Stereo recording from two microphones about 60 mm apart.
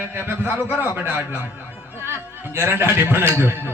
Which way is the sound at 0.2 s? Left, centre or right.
Right.